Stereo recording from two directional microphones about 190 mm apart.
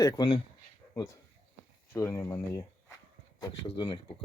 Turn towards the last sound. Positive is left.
turn(degrees=20)  # may be behind; listen again after turning